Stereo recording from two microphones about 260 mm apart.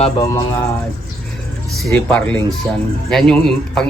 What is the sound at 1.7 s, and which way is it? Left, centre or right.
A man's voice, centre.